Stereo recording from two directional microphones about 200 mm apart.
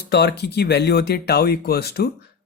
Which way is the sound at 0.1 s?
55° left (ahead or behind).